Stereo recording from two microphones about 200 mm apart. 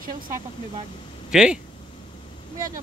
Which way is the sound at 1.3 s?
5° right (ahead or behind).